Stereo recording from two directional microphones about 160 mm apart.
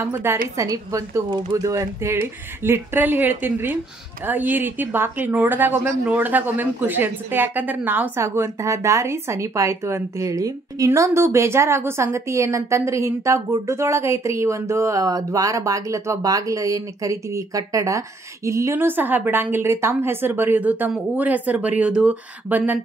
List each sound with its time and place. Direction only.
0.0 s a woman's voice: 15° right (ahead or behind)